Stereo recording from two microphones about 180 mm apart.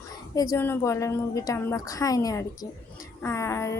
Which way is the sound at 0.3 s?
15° left (ahead or behind).